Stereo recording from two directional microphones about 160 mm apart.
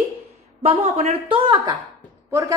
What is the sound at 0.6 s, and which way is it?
Speech, 45° right (ahead or behind).